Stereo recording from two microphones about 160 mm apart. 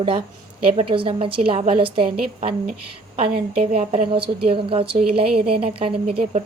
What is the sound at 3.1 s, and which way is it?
A woman's voice, 40° right (ahead or behind).